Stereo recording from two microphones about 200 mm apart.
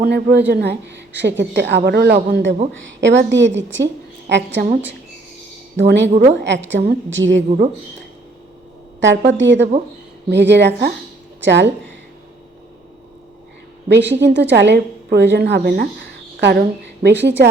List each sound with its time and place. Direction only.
0.0 s a woman's voice: 55° right (ahead or behind)
5.7 s a woman's voice: 60° right (ahead or behind)
9.0 s a woman's voice: 65° right (ahead or behind)
13.8 s a woman's voice: 60° right (ahead or behind)